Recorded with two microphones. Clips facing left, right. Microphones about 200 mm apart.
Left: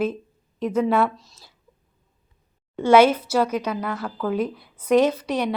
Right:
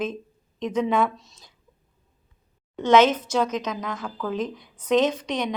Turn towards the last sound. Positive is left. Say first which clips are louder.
# left 3 dB
turn(degrees=10)  # may be behind; listen again after turning